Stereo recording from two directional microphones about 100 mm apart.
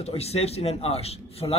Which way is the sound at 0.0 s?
90° left.